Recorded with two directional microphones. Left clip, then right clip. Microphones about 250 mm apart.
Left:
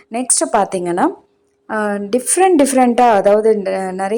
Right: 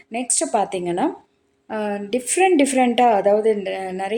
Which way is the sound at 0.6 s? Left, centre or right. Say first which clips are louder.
Left 6 dB; centre.